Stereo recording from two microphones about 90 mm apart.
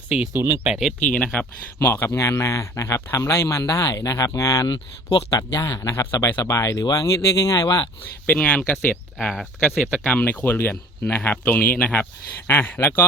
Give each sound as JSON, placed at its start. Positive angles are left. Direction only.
{"t": 0.3, "sound": "speech", "side_deg": -25}
{"t": 0.7, "sound": "speech", "side_deg": -5}
{"t": 1.1, "sound": "speech", "side_deg": 15}
{"t": 1.8, "sound": "a man's voice", "side_deg": 25}
{"t": 8.4, "sound": "speech", "side_deg": 15}